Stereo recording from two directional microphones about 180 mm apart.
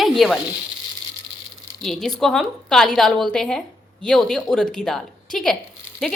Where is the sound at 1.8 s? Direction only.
5° left (ahead or behind).